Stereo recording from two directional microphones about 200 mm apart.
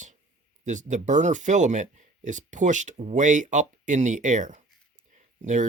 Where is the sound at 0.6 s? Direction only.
40° right (ahead or behind).